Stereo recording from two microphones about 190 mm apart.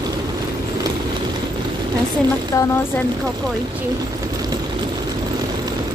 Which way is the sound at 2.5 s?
15° left (ahead or behind).